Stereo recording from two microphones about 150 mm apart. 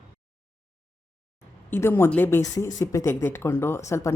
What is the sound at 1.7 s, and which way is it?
Speech, 15° left (ahead or behind).